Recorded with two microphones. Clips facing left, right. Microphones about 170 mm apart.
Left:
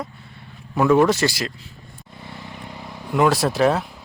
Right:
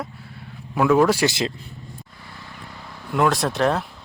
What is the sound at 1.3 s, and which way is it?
Speech, 25° right (ahead or behind).